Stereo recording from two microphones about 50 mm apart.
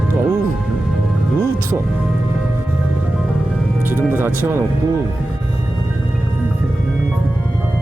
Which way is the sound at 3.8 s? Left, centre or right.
Right.